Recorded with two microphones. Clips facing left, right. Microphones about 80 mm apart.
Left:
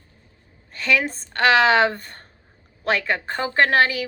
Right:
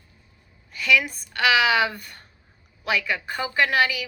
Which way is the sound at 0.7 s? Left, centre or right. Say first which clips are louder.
Even; left.